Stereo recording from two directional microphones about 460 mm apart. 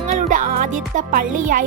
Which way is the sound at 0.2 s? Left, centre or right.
Centre.